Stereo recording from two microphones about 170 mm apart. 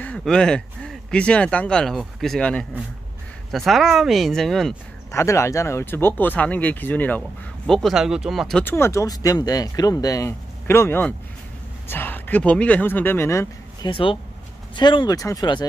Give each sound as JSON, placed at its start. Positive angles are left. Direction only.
{"t": 0.0, "sound": "speech", "side_deg": 5}
{"t": 5.1, "sound": "speech", "side_deg": 15}
{"t": 8.6, "sound": "speech", "side_deg": 15}
{"t": 13.8, "sound": "speech", "side_deg": 30}